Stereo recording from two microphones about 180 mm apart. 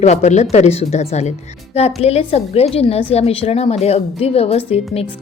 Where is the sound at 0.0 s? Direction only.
40° left (ahead or behind).